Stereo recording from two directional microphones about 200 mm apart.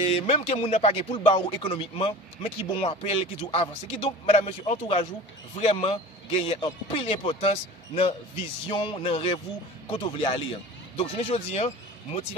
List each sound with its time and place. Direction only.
0.0 s speech: 30° left (ahead or behind)